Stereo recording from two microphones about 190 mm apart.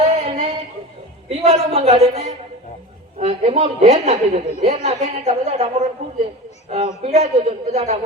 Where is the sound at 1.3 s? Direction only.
35° right (ahead or behind).